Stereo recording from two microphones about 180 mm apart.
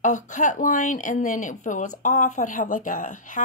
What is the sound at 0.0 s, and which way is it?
Speech, 45° left (ahead or behind).